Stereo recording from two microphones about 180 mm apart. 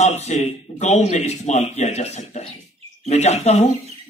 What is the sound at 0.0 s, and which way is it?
A man's voice, 40° left (ahead or behind).